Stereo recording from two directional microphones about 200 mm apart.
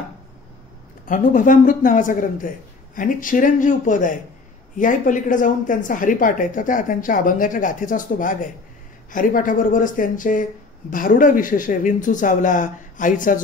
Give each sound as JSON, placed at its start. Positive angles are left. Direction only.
{"t": 1.0, "sound": "a woman's voice", "side_deg": 40}